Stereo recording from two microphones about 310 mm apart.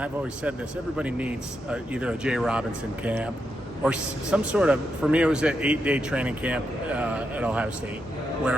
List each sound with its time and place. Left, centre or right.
0.9 s a man's voice: centre